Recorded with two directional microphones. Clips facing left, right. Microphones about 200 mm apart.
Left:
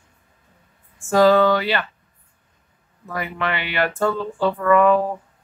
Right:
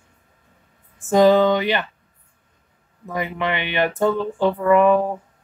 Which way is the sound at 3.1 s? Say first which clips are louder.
Right 2 dB; 20° right (ahead or behind).